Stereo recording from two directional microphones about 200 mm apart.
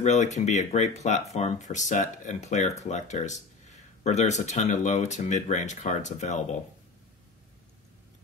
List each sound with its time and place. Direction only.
0.0 s speech: 35° left (ahead or behind)